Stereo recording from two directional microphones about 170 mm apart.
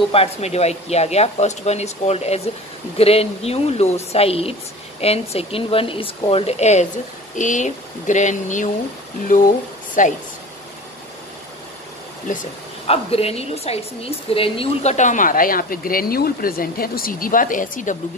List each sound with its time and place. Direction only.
0.1 s speech: 35° left (ahead or behind)
12.3 s speech: 50° left (ahead or behind)
12.8 s speech: 35° left (ahead or behind)